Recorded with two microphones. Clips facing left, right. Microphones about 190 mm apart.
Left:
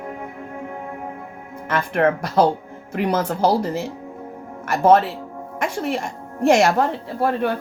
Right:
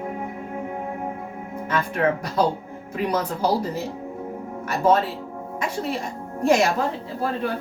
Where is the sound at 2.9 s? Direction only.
90° left.